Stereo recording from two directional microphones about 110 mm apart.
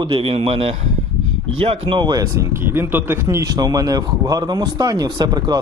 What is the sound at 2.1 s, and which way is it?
Speech, 30° right (ahead or behind).